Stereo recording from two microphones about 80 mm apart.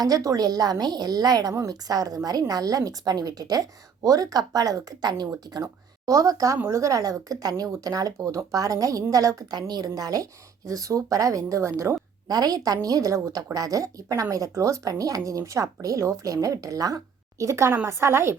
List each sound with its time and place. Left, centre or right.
0.0 s a woman's voice: right
5.5 s a woman's voice: right
9.5 s a woman's voice: right
12.3 s a woman's voice: right